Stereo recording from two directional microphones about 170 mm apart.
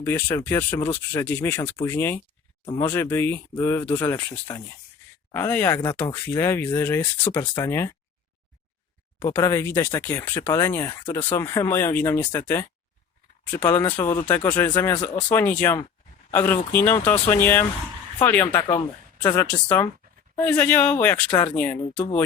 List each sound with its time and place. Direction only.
0.0 s speech: 15° left (ahead or behind)
9.1 s speech: 15° left (ahead or behind)
13.7 s speech: 10° left (ahead or behind)
13.9 s speech: 20° left (ahead or behind)